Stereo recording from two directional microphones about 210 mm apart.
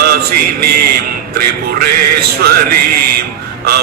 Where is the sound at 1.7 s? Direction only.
45° right (ahead or behind).